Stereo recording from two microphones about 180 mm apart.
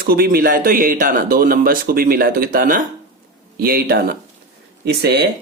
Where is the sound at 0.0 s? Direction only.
55° right (ahead or behind).